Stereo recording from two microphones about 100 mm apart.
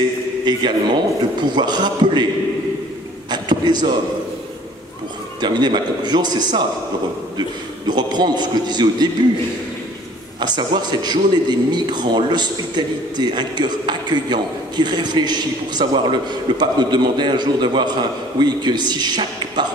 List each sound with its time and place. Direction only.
0.5 s a man's voice: 50° right (ahead or behind)
3.3 s a sound: 45° right (ahead or behind)
5.4 s a man's voice: 45° right (ahead or behind)
7.9 s a man's voice: 45° right (ahead or behind)
10.4 s a man's voice: 45° right (ahead or behind)